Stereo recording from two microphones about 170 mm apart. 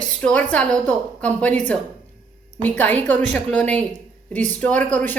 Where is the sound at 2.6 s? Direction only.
10° left (ahead or behind).